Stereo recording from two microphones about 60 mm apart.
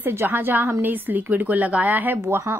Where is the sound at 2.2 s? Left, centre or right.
Right.